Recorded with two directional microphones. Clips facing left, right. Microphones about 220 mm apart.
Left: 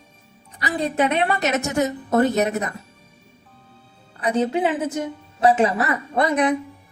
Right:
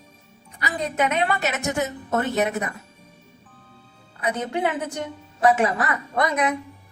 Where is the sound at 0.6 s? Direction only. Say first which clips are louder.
Left 3 dB; 30° left (ahead or behind).